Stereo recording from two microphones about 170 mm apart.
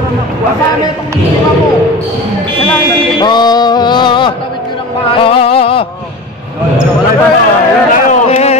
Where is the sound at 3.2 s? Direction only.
25° left (ahead or behind).